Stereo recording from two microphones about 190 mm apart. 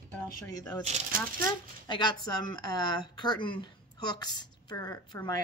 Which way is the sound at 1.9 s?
25° left (ahead or behind).